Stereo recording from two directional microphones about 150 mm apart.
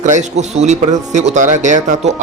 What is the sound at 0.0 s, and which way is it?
Speech, 50° right (ahead or behind).